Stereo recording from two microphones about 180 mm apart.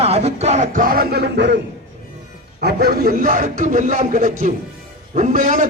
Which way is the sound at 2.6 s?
60° right (ahead or behind).